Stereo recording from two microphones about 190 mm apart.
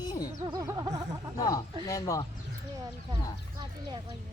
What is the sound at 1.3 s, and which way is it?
Speech, 20° left (ahead or behind).